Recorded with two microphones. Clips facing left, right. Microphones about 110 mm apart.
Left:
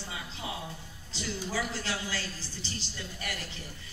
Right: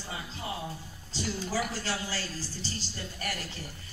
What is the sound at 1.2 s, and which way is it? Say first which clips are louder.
Speech: right 2 dB; 40° right (ahead or behind).